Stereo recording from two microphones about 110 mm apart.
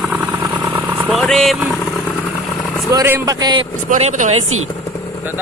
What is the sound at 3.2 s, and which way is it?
Speech, 40° right (ahead or behind).